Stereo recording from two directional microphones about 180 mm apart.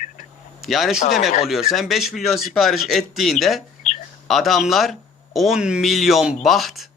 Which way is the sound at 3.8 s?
40° left (ahead or behind).